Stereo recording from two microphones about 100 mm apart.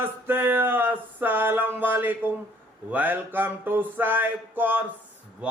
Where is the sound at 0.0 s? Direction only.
25° right (ahead or behind).